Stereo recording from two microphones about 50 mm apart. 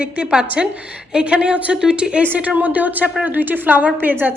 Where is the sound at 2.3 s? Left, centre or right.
Right.